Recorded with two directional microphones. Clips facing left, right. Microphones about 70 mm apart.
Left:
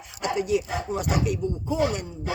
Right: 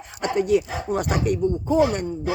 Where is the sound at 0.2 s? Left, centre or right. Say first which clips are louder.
Right 4 dB; right.